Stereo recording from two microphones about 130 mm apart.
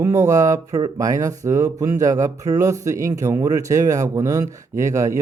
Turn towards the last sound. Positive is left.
turn(degrees=-25)  # may be behind; listen again after turning